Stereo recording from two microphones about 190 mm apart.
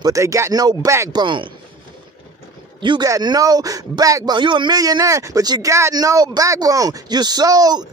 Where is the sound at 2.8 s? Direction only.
20° right (ahead or behind).